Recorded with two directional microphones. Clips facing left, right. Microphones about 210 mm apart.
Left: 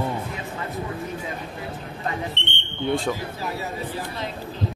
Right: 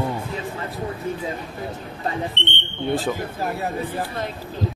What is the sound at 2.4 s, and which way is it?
Speech, 60° right (ahead or behind).